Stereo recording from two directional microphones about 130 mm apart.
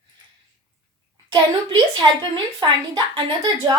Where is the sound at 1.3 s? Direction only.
40° right (ahead or behind).